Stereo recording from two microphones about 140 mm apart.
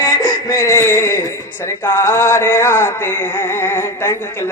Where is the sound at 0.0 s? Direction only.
25° left (ahead or behind).